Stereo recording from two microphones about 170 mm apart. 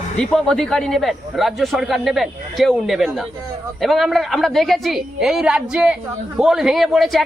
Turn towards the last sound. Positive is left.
turn(degrees=0)  # may be behind; listen again after turning